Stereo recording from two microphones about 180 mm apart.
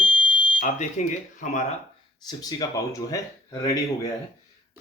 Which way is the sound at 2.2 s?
20° left (ahead or behind).